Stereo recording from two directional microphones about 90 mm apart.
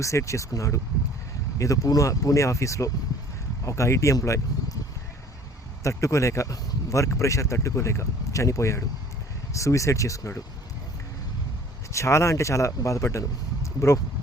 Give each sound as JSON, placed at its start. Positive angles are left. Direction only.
{"t": 0.0, "sound": "speech", "side_deg": 35}
{"t": 5.8, "sound": "speech", "side_deg": 35}
{"t": 11.9, "sound": "speech", "side_deg": 35}